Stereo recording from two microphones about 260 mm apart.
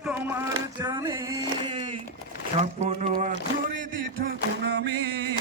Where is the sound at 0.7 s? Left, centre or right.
Centre.